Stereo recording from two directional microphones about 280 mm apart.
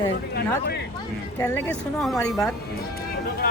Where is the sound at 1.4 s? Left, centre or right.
Centre.